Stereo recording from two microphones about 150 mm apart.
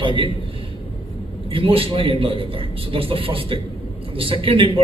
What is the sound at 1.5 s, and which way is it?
A man's voice, 35° right (ahead or behind).